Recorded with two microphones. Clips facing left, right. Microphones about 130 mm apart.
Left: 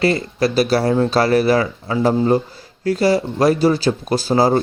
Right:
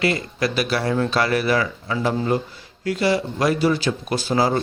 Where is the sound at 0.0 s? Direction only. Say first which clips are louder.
Left 5 dB; 35° left (ahead or behind).